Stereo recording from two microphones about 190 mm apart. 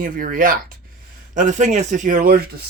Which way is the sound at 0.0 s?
45° right (ahead or behind).